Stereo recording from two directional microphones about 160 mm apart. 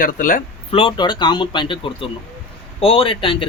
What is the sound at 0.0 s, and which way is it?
Speech, 60° left (ahead or behind).